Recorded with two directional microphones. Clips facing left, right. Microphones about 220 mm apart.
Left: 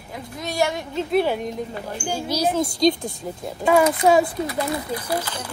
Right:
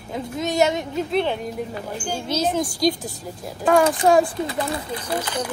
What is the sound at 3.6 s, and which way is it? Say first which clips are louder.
Speech: even; 5° left (ahead or behind).